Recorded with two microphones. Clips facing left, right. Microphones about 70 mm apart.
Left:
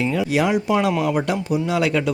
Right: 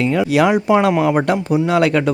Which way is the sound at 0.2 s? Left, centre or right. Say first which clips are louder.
Right 6 dB; right.